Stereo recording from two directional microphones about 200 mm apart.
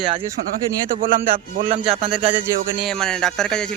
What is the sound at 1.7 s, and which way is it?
Speech, 30° right (ahead or behind).